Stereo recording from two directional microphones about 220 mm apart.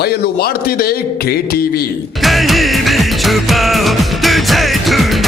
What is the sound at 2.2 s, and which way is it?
Music, centre (ahead or behind).